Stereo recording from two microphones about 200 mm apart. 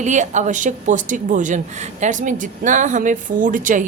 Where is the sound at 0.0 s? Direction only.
35° right (ahead or behind).